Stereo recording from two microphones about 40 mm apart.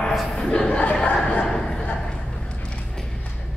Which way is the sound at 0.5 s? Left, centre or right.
Left.